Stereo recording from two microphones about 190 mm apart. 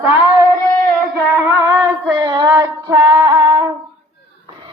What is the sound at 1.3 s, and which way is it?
Music, 15° right (ahead or behind).